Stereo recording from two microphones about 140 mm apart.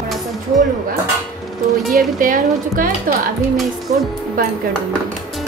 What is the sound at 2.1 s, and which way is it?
Speech, 75° right (ahead or behind).